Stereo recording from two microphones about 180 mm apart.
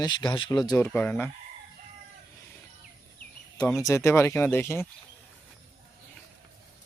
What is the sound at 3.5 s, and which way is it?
Speech, 15° left (ahead or behind).